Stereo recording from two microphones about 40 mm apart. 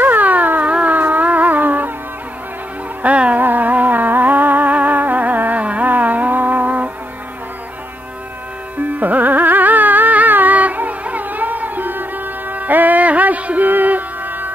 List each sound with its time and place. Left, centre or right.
0.0 s dog: right
0.7 s a sound: right
0.9 s music: right
3.0 s music: right
3.3 s music: right
9.0 s carnatic music: right